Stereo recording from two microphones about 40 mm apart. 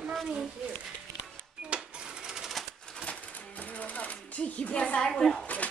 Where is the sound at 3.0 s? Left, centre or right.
Left.